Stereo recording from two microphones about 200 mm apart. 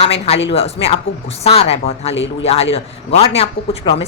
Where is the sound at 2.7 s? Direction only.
30° left (ahead or behind).